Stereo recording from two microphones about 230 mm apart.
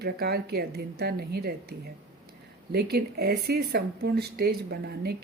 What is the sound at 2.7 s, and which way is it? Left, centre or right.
Speech, right.